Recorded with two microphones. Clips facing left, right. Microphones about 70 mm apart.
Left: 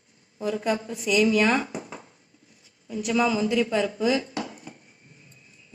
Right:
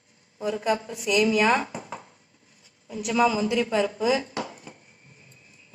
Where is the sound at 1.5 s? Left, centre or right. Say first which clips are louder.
Even; right.